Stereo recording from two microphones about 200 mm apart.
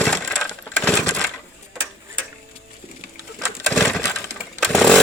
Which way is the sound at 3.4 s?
Centre (ahead or behind).